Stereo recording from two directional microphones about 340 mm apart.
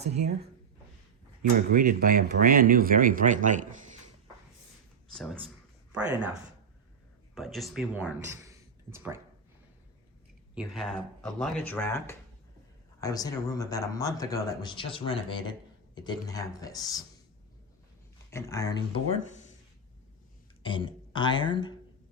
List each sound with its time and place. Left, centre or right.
0.0 s speech: centre
1.7 s speech: right
5.1 s speech: centre
7.3 s speech: centre
10.5 s speech: centre
18.3 s speech: centre
20.6 s speech: centre